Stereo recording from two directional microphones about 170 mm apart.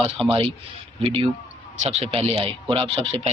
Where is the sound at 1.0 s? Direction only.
30° right (ahead or behind).